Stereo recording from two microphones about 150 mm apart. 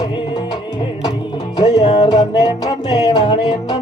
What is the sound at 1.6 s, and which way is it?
Music, 25° left (ahead or behind).